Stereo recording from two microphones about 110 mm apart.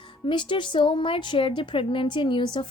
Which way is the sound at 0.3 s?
45° left (ahead or behind).